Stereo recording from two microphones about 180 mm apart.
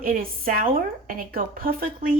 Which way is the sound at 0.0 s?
50° right (ahead or behind).